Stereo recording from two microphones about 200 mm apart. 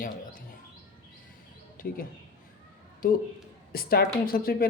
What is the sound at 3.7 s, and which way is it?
Speech, 50° left (ahead or behind).